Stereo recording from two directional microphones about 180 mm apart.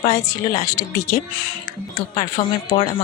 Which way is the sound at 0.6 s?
20° left (ahead or behind).